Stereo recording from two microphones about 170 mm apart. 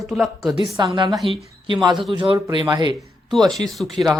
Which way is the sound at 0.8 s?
25° right (ahead or behind).